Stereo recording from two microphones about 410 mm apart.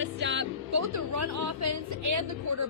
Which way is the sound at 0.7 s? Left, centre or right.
Right.